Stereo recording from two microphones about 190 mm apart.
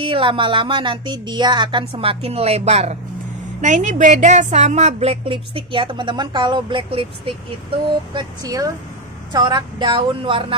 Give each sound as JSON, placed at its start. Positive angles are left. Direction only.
{"t": 0.0, "sound": "a woman's voice", "side_deg": -30}